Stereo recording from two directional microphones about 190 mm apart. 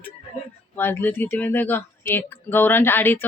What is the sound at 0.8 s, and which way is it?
Speech, 10° left (ahead or behind).